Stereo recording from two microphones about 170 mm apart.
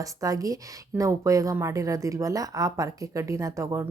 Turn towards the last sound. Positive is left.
turn(degrees=-20)  # may be behind; listen again after turning